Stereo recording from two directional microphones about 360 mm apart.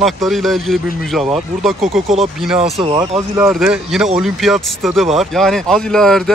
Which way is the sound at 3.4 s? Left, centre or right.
Centre.